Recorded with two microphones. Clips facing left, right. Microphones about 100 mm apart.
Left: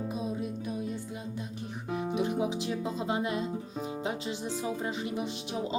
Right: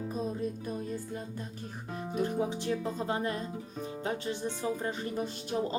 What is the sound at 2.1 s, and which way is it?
Music, 5° left (ahead or behind).